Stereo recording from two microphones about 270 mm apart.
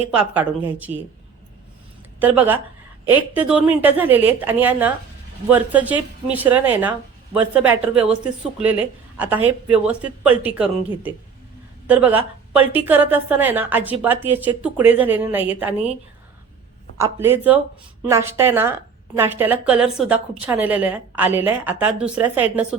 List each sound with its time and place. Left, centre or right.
0.1 s speech: centre
2.1 s a woman's voice: centre
17.0 s a woman's voice: centre